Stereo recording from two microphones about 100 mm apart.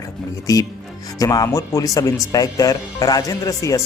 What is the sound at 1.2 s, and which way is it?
Speech, 35° left (ahead or behind).